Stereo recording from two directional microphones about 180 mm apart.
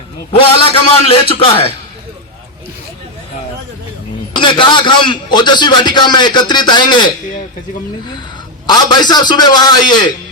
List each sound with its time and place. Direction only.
0.3 s a man's voice: 30° left (ahead or behind)
4.4 s a man's voice: 25° left (ahead or behind)
8.6 s a man's voice: 25° left (ahead or behind)